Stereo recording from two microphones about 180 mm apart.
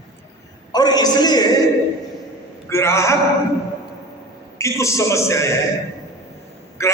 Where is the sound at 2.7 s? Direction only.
15° left (ahead or behind).